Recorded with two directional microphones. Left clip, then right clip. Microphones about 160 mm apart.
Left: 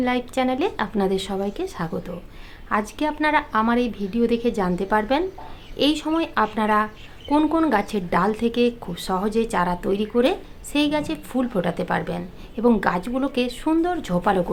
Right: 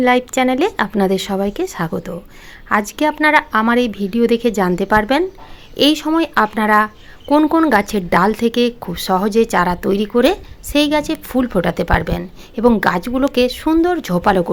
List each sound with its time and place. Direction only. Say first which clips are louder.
0.0 s a woman's voice: right 9 dB; 45° right (ahead or behind)